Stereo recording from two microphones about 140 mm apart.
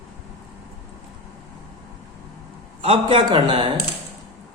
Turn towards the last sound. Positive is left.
turn(degrees=-40)  # may be behind; listen again after turning